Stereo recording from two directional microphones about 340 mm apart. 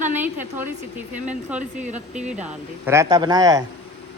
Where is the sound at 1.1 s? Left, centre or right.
Right.